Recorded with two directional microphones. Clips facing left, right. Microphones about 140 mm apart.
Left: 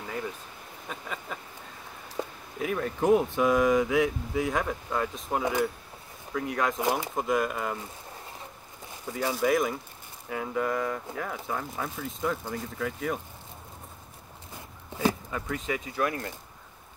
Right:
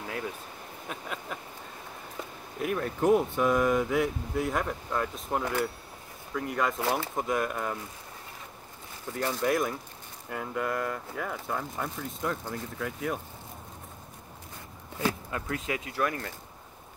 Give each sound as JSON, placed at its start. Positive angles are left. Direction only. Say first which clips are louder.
{"t": 0.8, "sound": "a sound", "louder": "even", "side_deg": -5}
{"t": 2.2, "sound": "a sound", "louder": "left 7 dB", "side_deg": 30}
{"t": 2.6, "sound": "speech", "louder": "even", "side_deg": 0}
{"t": 5.4, "sound": "speech", "louder": "left 4 dB", "side_deg": 15}
{"t": 6.3, "sound": "speech", "louder": "left 1 dB", "side_deg": 0}
{"t": 6.8, "sound": "speech", "louder": "left 1 dB", "side_deg": 15}
{"t": 7.2, "sound": "speech", "louder": "left 2 dB", "side_deg": 0}
{"t": 9.1, "sound": "speech", "louder": "left 2 dB", "side_deg": 5}
{"t": 15.3, "sound": "speech", "louder": "left 1 dB", "side_deg": -5}
{"t": 16.0, "sound": "speech", "louder": "left 1 dB", "side_deg": 15}